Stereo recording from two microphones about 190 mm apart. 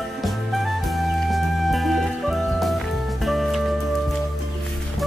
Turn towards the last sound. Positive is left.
turn(degrees=0)  # may be behind; listen again after turning